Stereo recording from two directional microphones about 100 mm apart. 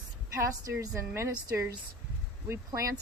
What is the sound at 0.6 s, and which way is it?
A woman's voice, 35° right (ahead or behind).